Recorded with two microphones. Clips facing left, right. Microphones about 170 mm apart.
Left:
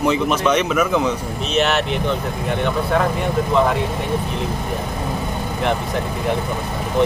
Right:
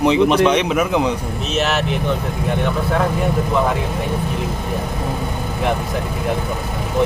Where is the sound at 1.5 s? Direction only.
Centre (ahead or behind).